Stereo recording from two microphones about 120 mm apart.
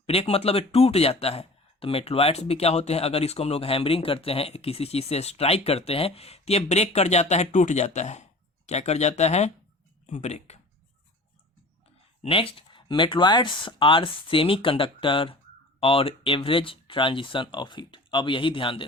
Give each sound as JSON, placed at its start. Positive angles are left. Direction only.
{"t": 0.0, "sound": "speech", "side_deg": 55}
{"t": 12.2, "sound": "speech", "side_deg": 50}